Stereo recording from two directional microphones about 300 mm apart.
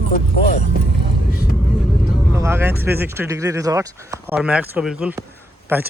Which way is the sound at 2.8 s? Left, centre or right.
Centre.